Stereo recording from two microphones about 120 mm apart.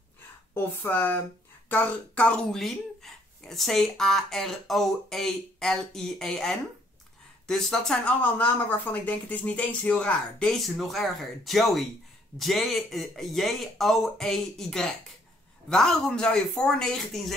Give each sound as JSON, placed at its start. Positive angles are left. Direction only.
{"t": 0.6, "sound": "a woman's voice", "side_deg": 15}